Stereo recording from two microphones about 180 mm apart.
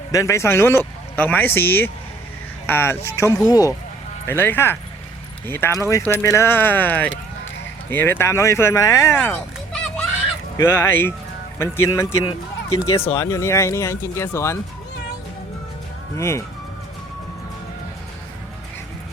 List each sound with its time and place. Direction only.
0.1 s speech: 15° left (ahead or behind)
10.6 s speech: 15° left (ahead or behind)
16.1 s speech: 15° left (ahead or behind)